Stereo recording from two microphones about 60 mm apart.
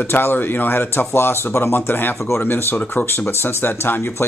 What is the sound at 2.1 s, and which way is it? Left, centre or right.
Speech, left.